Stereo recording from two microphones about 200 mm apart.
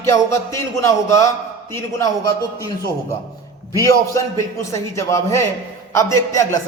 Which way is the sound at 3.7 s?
15° left (ahead or behind).